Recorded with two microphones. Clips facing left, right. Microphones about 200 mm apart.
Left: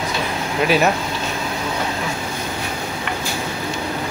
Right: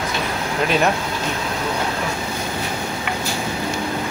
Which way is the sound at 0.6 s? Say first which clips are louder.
Left 2 dB; 5° left (ahead or behind).